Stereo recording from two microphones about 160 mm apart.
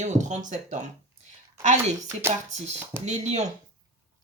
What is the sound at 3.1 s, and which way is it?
Speech, 45° right (ahead or behind).